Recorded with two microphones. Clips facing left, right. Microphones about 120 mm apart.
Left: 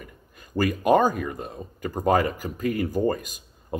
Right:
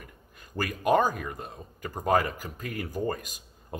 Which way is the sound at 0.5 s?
15° left (ahead or behind).